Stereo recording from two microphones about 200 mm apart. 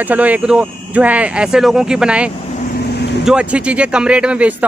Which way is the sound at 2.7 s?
55° left (ahead or behind).